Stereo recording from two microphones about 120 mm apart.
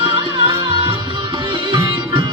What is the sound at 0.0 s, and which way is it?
Music, 45° right (ahead or behind).